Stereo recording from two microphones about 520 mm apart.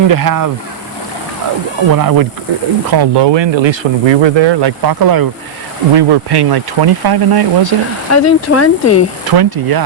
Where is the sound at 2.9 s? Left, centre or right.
Right.